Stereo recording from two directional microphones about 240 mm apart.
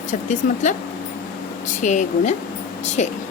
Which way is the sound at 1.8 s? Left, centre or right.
Left.